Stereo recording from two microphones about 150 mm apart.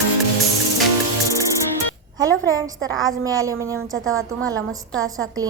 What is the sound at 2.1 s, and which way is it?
A woman's voice, 25° right (ahead or behind).